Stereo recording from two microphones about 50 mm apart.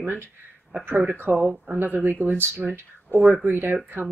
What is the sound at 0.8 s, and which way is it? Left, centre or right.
Speech, right.